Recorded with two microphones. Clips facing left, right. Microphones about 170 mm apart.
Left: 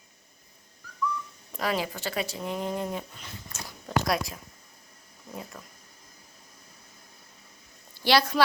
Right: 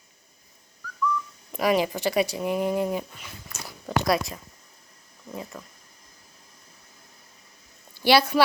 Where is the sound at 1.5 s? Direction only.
15° right (ahead or behind).